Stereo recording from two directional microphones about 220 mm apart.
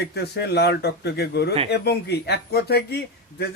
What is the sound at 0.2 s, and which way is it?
A man's voice, 50° left (ahead or behind).